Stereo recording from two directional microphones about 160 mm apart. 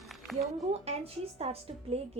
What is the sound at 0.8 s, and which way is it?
Speech, 40° right (ahead or behind).